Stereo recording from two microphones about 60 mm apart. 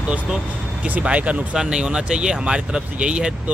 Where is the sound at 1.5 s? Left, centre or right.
Centre.